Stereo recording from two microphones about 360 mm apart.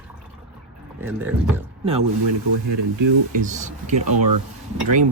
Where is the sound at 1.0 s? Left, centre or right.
Centre.